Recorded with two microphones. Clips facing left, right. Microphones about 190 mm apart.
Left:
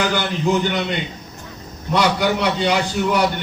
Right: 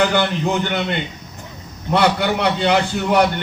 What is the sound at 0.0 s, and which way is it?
A man's voice, 60° right (ahead or behind).